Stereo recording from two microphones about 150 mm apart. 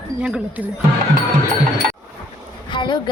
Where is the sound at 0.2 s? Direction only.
5° right (ahead or behind).